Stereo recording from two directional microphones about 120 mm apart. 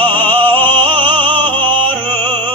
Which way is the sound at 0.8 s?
45° right (ahead or behind).